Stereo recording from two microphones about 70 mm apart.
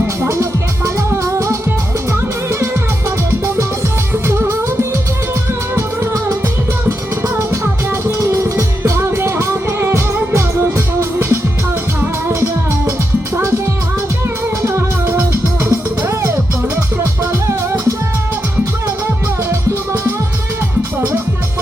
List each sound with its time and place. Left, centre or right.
0.2 s music: right
4.3 s music: right
5.7 s music: right
13.3 s music: right
14.6 s music: right
17.4 s music: right
19.5 s music: right